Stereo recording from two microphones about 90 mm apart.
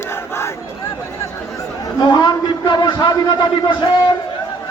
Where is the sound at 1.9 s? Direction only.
55° left (ahead or behind).